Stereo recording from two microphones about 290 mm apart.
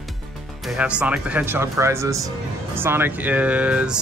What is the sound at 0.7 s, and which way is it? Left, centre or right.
Speech, centre.